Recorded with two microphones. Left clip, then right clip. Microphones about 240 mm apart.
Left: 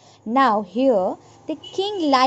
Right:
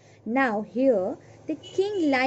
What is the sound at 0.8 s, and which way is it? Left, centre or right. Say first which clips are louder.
Speech: left 3 dB; left.